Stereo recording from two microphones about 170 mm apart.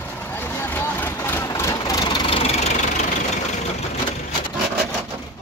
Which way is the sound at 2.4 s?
40° left (ahead or behind).